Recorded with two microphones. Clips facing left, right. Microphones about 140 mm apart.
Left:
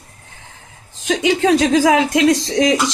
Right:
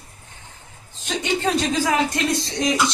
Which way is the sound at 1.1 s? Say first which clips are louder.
Left 8 dB; 90° left.